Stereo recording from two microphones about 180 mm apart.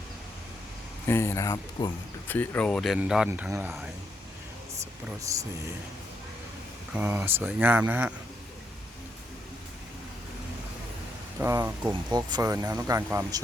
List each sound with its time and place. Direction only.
1.0 s speech: 15° left (ahead or behind); by 3.8 s 10° right (ahead or behind)
5.3 s speech: 15° right (ahead or behind)
6.9 s speech: 10° right (ahead or behind)
11.3 s speech: 15° right (ahead or behind)